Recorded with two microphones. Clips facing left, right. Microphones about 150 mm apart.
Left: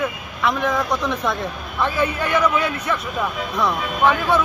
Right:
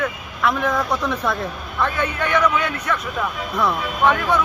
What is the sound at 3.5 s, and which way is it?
Speech, centre (ahead or behind).